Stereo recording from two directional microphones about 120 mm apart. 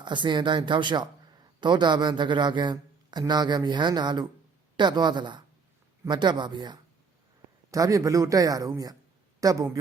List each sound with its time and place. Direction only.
0.0 s a man's voice: 40° right (ahead or behind)
7.7 s a man's voice: 25° right (ahead or behind)